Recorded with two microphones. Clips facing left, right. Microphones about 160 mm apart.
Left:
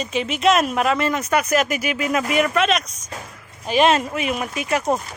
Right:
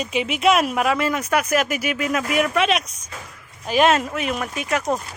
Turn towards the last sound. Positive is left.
turn(degrees=5)  # may be behind; listen again after turning